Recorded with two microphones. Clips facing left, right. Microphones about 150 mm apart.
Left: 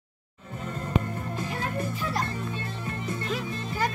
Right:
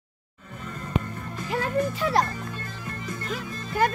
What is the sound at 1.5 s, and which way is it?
Speech, 80° right.